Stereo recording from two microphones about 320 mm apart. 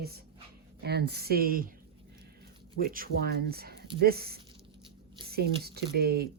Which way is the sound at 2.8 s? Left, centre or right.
Right.